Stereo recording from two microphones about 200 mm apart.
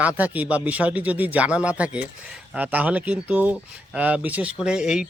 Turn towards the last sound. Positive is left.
turn(degrees=-5)  # may be behind; listen again after turning